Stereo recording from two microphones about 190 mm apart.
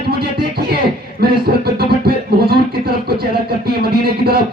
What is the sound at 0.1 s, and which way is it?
Music, 55° right (ahead or behind).